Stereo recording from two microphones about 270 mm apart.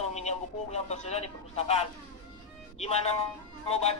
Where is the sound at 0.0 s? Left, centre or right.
Left.